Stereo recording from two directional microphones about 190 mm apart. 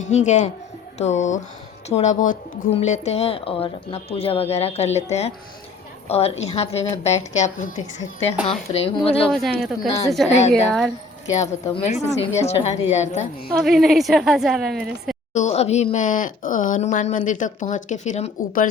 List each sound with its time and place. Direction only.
0.0 s speech: 40° left (ahead or behind)
8.7 s speech: 30° left (ahead or behind)
9.3 s a woman's voice: centre (ahead or behind)
11.3 s speech: 35° left (ahead or behind)
13.5 s a woman's voice: centre (ahead or behind)
15.3 s speech: 40° left (ahead or behind)